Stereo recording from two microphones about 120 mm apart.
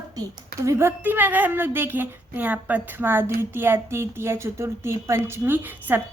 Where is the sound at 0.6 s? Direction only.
20° right (ahead or behind).